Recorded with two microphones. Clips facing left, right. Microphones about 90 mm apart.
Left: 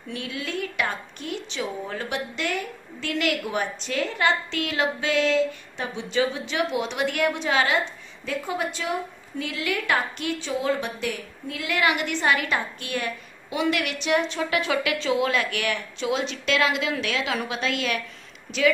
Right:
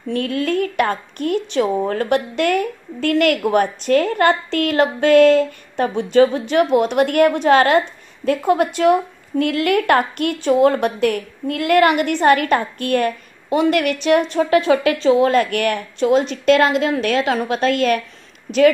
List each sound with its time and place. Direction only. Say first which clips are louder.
0.1 s a woman's voice: right 11 dB; 50° right (ahead or behind)
18.5 s a woman's voice: right 13 dB; 35° right (ahead or behind)